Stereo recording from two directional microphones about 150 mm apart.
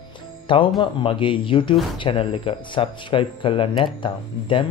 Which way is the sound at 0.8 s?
35° left (ahead or behind).